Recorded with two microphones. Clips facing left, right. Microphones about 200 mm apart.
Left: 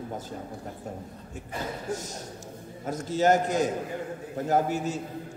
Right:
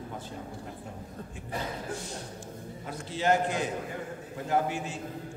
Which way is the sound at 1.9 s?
40° left (ahead or behind).